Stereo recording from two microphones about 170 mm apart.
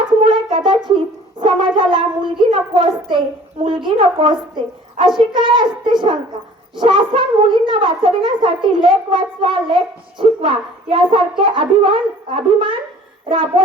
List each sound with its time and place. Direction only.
0.2 s brass instrument: 30° right (ahead or behind)
0.9 s a child's voice: 30° right (ahead or behind)